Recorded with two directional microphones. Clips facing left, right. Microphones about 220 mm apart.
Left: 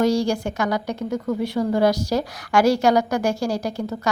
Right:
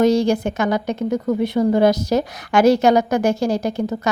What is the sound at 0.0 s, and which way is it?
A woman's voice, 20° right (ahead or behind).